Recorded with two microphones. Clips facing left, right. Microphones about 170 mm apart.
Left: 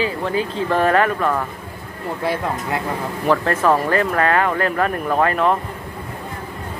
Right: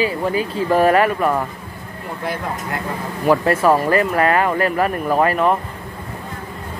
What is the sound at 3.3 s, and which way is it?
Speech, 10° right (ahead or behind).